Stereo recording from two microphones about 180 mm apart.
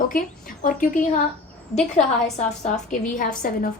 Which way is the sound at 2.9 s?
45° left (ahead or behind).